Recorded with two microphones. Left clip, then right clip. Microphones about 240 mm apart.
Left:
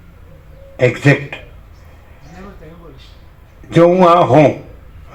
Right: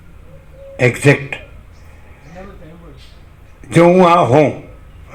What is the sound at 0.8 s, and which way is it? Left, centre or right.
Speech, right.